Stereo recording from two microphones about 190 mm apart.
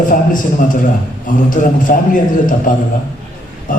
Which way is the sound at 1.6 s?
40° left (ahead or behind).